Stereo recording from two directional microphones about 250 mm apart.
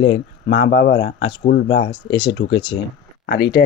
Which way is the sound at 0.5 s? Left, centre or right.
Left.